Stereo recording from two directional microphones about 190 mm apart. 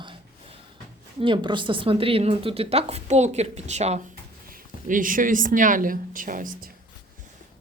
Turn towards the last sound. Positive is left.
turn(degrees=-50)  # may be behind; listen again after turning